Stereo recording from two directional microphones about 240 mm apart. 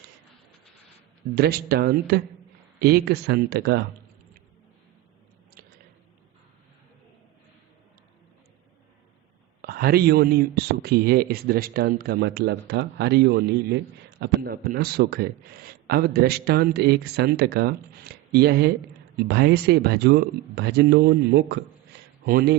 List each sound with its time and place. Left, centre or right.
1.4 s a man's voice: right
9.6 s a man's voice: right